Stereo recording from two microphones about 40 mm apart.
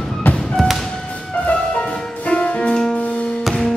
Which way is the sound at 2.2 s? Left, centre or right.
Left.